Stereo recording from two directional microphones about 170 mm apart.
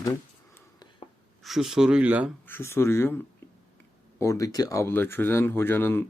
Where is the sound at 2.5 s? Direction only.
15° left (ahead or behind).